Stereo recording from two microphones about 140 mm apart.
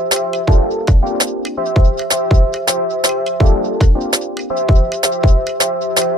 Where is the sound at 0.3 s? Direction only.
Centre (ahead or behind).